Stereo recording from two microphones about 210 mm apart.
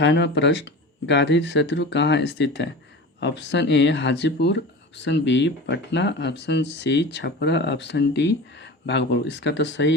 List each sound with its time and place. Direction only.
0.0 s speech: 55° left (ahead or behind)